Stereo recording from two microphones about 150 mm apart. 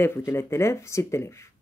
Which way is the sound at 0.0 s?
15° left (ahead or behind).